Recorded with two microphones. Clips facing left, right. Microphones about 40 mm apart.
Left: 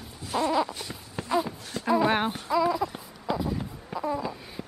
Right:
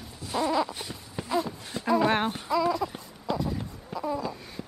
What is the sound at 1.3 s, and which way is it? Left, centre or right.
Wail, centre.